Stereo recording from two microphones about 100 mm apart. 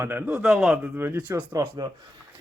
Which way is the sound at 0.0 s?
20° right (ahead or behind).